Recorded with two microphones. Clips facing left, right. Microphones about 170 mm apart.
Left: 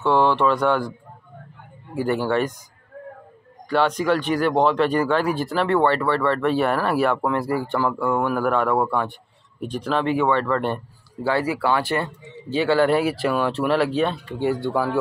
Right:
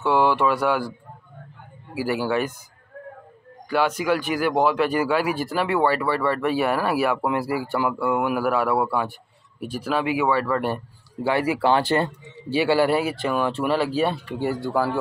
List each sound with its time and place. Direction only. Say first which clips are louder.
0.0 s speech: left 1 dB; 10° right (ahead or behind)
2.0 s speech: left 2 dB; 5° right (ahead or behind)
3.6 s speech: left 2 dB; 5° right (ahead or behind); by 12.1 s 25° right (ahead or behind)
12.4 s speech: left 1 dB; 10° right (ahead or behind)